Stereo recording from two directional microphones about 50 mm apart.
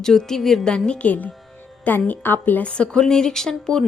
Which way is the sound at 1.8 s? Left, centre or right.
Left.